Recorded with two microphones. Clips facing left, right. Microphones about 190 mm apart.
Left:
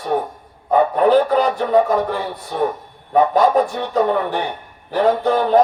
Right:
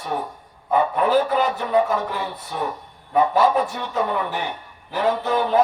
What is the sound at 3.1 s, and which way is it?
Speech, 40° left (ahead or behind).